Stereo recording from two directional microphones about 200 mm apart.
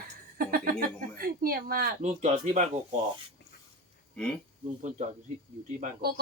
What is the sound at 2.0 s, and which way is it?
Speech, 35° right (ahead or behind).